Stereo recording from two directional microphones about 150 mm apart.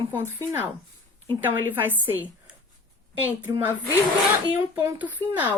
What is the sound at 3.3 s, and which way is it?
Speech, 10° right (ahead or behind).